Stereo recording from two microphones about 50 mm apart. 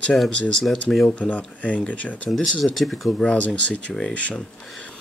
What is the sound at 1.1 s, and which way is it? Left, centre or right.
Speech, left.